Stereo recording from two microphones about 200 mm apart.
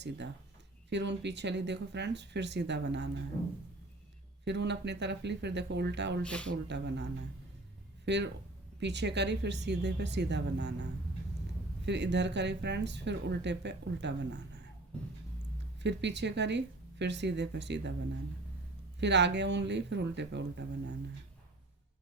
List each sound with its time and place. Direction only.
0.9 s speech: 60° right (ahead or behind)
4.4 s speech: 60° right (ahead or behind)
6.2 s speech: 5° left (ahead or behind)
6.5 s speech: 60° right (ahead or behind)
15.8 s speech: 60° right (ahead or behind)
18.9 s speech: 60° right (ahead or behind)